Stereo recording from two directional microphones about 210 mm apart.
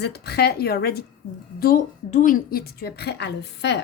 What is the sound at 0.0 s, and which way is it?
A woman's voice, 50° left (ahead or behind).